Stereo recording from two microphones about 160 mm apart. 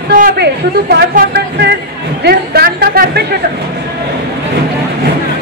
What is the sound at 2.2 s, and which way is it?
Music, 75° right (ahead or behind).